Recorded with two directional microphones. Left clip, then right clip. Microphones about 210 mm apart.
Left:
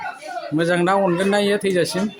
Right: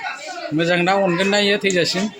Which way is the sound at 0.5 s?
5° left (ahead or behind).